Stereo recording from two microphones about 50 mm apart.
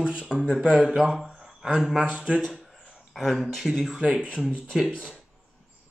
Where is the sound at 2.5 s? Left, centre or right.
Centre.